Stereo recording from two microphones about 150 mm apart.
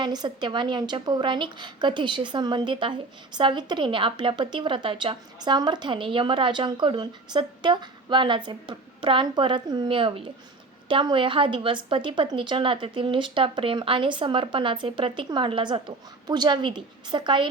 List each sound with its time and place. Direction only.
0.0 s a woman's voice: 30° right (ahead or behind)